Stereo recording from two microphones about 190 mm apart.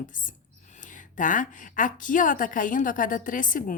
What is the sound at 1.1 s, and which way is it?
A woman's voice, 45° left (ahead or behind).